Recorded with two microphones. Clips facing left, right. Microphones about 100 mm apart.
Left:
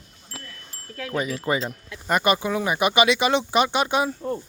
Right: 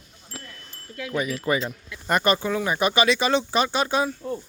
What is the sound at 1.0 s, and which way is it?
Speech, 35° left (ahead or behind).